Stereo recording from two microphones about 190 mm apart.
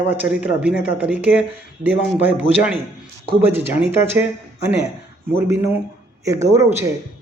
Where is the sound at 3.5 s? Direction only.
10° right (ahead or behind).